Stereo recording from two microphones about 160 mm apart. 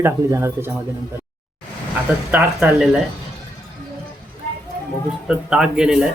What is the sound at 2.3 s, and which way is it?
Speech, 10° right (ahead or behind).